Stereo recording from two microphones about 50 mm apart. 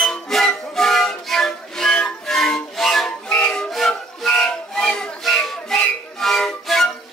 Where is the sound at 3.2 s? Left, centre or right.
Centre.